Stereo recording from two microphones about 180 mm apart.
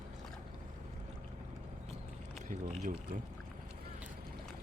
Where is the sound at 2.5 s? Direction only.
50° right (ahead or behind).